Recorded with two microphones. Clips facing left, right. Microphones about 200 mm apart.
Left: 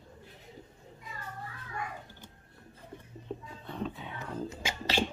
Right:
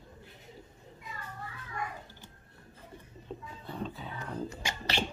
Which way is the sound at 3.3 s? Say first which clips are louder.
Left 3 dB; 5° left (ahead or behind).